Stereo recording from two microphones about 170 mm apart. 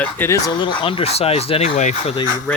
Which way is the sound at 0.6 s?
30° left (ahead or behind).